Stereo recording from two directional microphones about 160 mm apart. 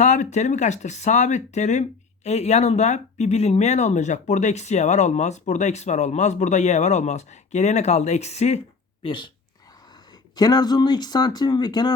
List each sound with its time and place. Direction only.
0.0 s speech: 50° left (ahead or behind)
9.0 s speech: 30° left (ahead or behind)